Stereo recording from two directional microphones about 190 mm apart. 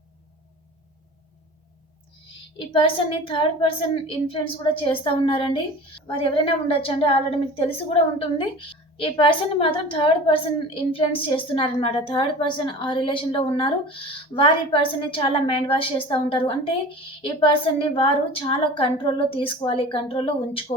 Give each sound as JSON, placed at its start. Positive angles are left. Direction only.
{"t": 2.6, "sound": "a woman's voice", "side_deg": 25}
{"t": 8.4, "sound": "a woman's voice", "side_deg": 30}